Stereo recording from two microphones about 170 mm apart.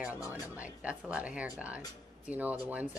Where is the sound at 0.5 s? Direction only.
5° right (ahead or behind).